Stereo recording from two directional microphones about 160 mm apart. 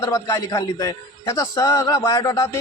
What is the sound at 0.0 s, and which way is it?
A man's voice, 20° left (ahead or behind).